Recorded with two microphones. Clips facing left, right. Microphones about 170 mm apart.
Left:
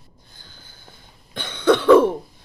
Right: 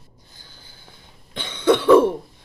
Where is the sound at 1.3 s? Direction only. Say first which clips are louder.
Even; 50° left (ahead or behind).